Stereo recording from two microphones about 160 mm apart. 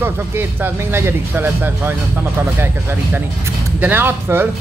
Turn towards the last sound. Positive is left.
turn(degrees=-15)  # may be behind; listen again after turning